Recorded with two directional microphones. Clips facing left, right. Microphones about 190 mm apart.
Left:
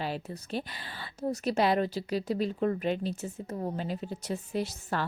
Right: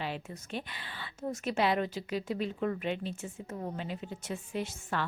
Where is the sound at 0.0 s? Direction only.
40° left (ahead or behind).